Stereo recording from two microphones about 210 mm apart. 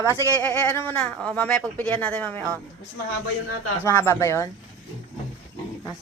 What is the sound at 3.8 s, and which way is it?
Speech, 10° left (ahead or behind).